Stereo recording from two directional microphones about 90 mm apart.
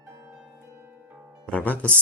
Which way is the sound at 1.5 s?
15° left (ahead or behind).